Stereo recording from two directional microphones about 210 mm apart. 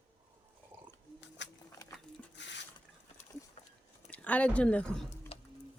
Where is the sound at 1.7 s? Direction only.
15° left (ahead or behind).